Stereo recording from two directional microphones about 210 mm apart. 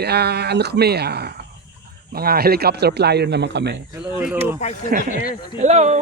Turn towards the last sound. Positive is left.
turn(degrees=-35)  # may be behind; listen again after turning